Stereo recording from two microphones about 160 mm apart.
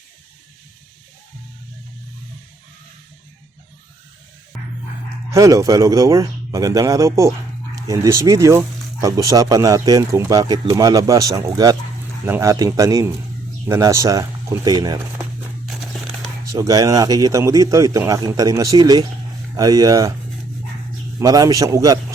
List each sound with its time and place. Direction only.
5.3 s speech: 20° right (ahead or behind)
15.6 s crumpling: centre (ahead or behind)
16.5 s speech: 20° right (ahead or behind)
21.2 s speech: 20° right (ahead or behind)